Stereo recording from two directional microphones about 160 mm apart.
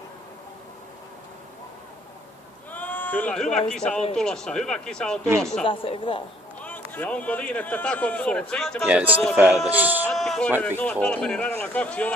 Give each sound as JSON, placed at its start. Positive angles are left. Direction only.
{"t": 2.7, "sound": "bleat", "side_deg": 10}
{"t": 3.8, "sound": "speech", "side_deg": 5}
{"t": 5.6, "sound": "speech", "side_deg": 35}
{"t": 6.6, "sound": "speech", "side_deg": 10}
{"t": 8.9, "sound": "speech", "side_deg": -10}
{"t": 10.1, "sound": "speech", "side_deg": 5}